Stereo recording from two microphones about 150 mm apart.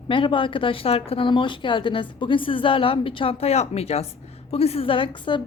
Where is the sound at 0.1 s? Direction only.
35° left (ahead or behind).